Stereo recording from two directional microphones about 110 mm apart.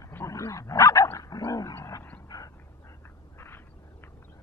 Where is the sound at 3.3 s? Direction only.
20° left (ahead or behind).